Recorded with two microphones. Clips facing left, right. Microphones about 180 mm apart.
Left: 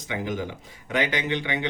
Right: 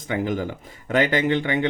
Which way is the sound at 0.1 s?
50° right (ahead or behind).